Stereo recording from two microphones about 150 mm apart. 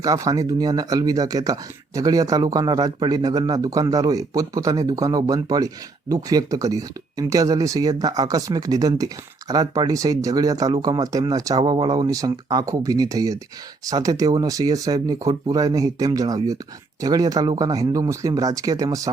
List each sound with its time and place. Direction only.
0.0 s speech: 25° right (ahead or behind)